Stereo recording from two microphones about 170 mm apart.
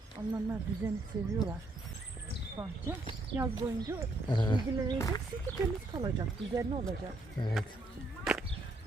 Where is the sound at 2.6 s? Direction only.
15° right (ahead or behind).